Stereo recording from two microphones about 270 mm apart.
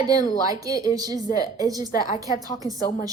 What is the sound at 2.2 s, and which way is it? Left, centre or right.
Speech, centre.